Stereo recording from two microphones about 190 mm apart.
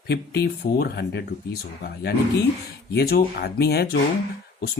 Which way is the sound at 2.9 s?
55° left (ahead or behind).